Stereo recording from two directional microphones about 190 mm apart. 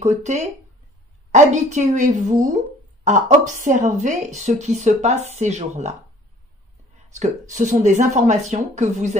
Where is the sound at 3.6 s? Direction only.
40° right (ahead or behind).